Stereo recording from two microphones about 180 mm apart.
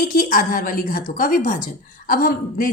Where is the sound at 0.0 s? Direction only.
50° left (ahead or behind).